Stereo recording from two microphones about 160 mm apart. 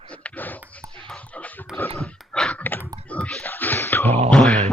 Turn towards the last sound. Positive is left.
turn(degrees=5)  # may be behind; listen again after turning